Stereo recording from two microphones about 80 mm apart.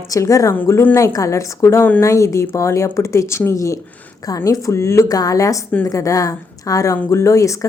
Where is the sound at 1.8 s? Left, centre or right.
Left.